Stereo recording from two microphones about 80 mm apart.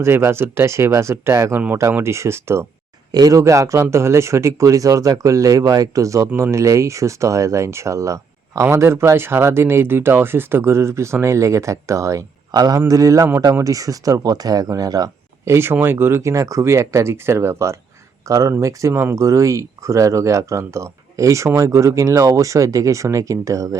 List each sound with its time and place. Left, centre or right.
0.0 s speech: right
3.1 s speech: right
12.5 s speech: right
15.4 s speech: right
16.2 s speech: right